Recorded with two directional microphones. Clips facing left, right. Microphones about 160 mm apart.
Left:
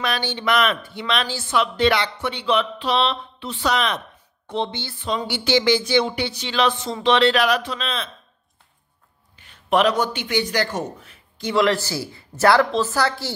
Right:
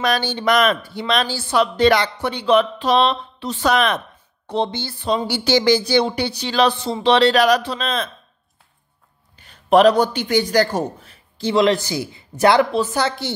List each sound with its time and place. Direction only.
0.0 s speech: 40° right (ahead or behind)
4.5 s speech: 40° right (ahead or behind)
9.4 s a man's voice: 40° right (ahead or behind)
11.5 s speech: 20° right (ahead or behind)